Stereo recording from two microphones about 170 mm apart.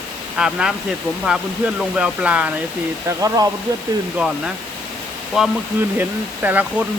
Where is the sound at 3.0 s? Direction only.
20° right (ahead or behind).